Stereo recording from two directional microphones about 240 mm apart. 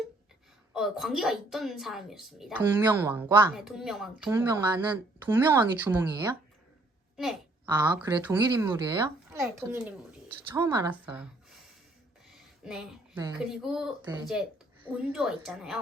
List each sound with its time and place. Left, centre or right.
0.7 s a woman's voice: centre
7.2 s a sound: centre
7.8 s speech: centre
12.6 s a woman's voice: centre
14.0 s speech: centre
14.8 s a woman's voice: centre